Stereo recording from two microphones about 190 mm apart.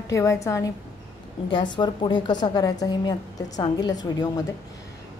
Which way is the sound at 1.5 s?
25° left (ahead or behind).